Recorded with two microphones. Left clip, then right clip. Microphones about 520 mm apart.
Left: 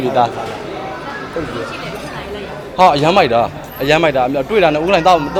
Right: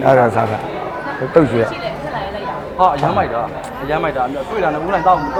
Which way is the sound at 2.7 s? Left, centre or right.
Left.